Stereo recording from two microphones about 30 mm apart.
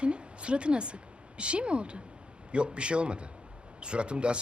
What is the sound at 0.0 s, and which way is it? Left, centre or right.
A woman's voice, right.